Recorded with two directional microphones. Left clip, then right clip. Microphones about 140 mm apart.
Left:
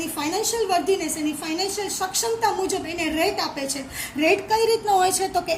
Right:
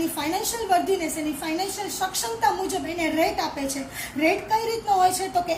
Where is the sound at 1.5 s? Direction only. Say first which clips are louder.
Left 2 dB; 30° left (ahead or behind).